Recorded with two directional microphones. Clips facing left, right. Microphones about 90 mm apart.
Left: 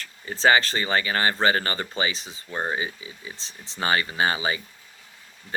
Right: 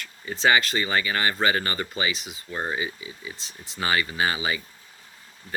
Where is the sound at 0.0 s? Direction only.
35° left (ahead or behind).